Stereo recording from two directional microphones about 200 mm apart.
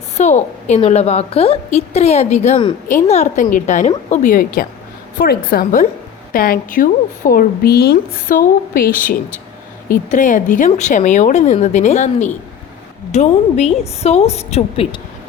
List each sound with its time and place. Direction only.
0.2 s a woman's voice: 35° left (ahead or behind)